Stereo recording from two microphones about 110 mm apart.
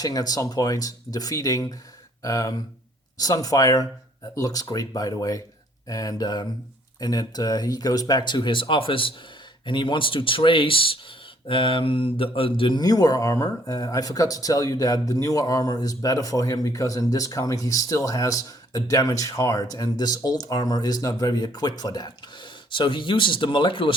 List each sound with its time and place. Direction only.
0.0 s speech: 35° left (ahead or behind)